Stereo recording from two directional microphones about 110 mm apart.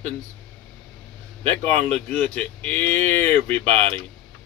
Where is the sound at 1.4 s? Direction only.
20° left (ahead or behind).